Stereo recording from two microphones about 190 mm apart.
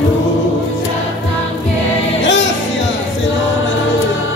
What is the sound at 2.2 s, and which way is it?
Music, 70° left (ahead or behind).